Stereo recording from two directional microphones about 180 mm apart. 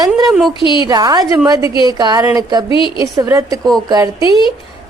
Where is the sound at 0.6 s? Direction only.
25° left (ahead or behind).